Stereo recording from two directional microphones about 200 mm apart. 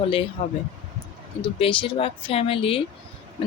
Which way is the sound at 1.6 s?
25° left (ahead or behind).